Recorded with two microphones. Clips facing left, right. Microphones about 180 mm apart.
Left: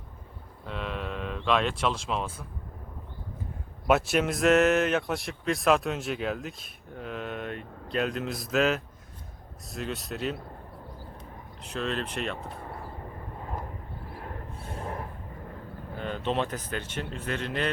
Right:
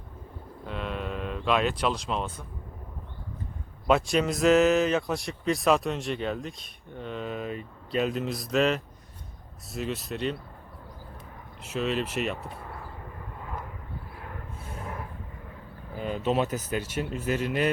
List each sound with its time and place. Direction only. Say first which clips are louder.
0.6 s speech: right 1 dB; centre (ahead or behind)
3.8 s speech: even; 5° left (ahead or behind)
11.6 s speech: right 3 dB; 5° right (ahead or behind)
13.4 s vehicle: left 1 dB; 35° left (ahead or behind)
14.8 s a sound: left 2 dB; 35° left (ahead or behind)
16.0 s speech: right 3 dB; 5° right (ahead or behind)